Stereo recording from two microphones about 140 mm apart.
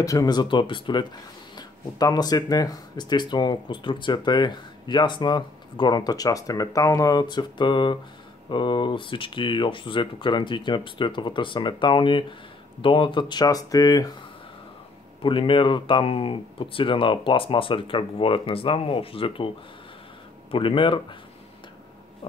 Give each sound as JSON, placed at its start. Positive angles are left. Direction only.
{"t": 0.0, "sound": "speech", "side_deg": 25}
{"t": 15.2, "sound": "speech", "side_deg": 40}
{"t": 20.5, "sound": "speech", "side_deg": 40}